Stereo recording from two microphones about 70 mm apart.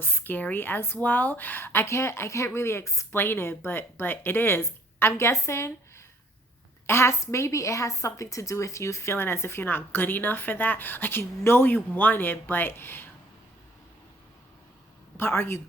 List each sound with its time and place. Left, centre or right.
0.0 s a woman's voice: left
3.1 s a woman's voice: left
6.8 s a woman's voice: left
15.2 s a woman's voice: left